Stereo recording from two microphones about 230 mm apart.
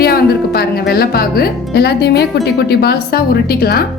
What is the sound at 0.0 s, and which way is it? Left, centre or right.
A woman's voice, left.